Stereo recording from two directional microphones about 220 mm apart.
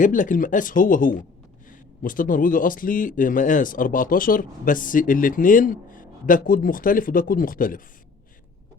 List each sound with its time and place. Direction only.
0.0 s speech: 35° left (ahead or behind)